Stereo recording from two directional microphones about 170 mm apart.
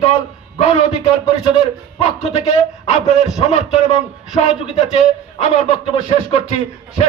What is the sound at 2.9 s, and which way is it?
A man's voice, 40° left (ahead or behind).